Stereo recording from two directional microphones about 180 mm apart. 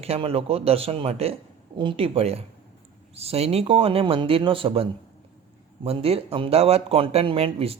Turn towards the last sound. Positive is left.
turn(degrees=-35)  # may be behind; listen again after turning